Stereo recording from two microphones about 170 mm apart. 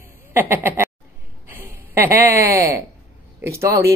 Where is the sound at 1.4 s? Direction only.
15° right (ahead or behind).